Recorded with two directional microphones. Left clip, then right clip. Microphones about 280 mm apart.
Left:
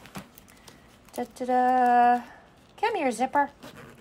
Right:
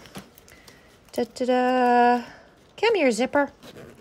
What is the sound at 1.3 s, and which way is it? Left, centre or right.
Speech, right.